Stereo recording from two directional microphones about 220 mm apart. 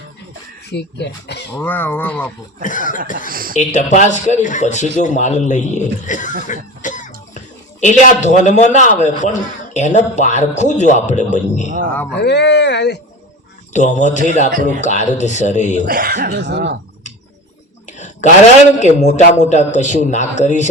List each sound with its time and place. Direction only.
0.7 s speech: 50° left (ahead or behind)
1.5 s speech: 10° left (ahead or behind)
2.6 s a man's voice: 35° left (ahead or behind)
3.2 s speech: 40° right (ahead or behind)
3.6 s a man's voice: 35° left (ahead or behind)
6.5 s cough: 35° left (ahead or behind)
7.8 s a man's voice: 35° left (ahead or behind)
12.1 s speech: 50° left (ahead or behind)
13.7 s a man's voice: 35° left (ahead or behind)
15.9 s speech: 40° right (ahead or behind)
17.8 s a sound: 30° left (ahead or behind)
18.8 s a man's voice: 30° left (ahead or behind)